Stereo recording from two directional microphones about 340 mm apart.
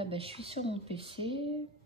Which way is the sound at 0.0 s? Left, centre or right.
Centre.